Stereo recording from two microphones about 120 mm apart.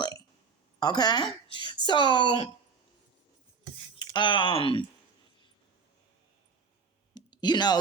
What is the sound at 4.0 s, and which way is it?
Speech, 40° left (ahead or behind).